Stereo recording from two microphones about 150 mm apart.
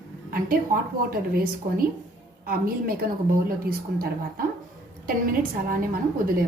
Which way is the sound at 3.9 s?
90° right.